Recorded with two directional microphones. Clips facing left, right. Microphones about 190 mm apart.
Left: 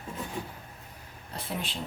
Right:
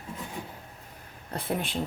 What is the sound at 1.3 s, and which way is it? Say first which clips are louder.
Speech: right 5 dB; 55° right (ahead or behind).